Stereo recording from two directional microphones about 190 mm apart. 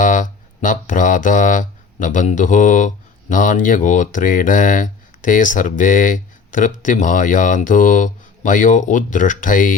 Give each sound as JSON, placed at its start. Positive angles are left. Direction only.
{"t": 0.0, "sound": "speech", "side_deg": 45}